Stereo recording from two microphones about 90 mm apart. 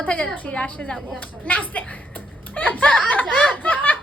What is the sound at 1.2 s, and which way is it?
Speech, 20° left (ahead or behind).